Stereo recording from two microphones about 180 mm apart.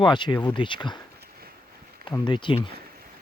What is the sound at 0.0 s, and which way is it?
Speech, 25° left (ahead or behind).